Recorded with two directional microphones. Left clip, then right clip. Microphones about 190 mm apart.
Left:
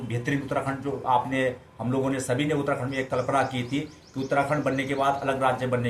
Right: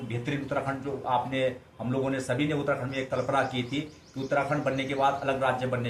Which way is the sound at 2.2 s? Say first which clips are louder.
Left 2 dB; 55° left (ahead or behind).